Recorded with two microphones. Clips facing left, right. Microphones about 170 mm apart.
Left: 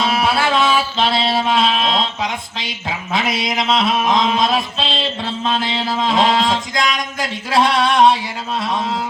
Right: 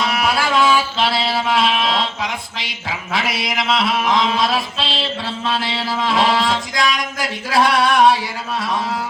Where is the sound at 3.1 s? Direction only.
20° left (ahead or behind).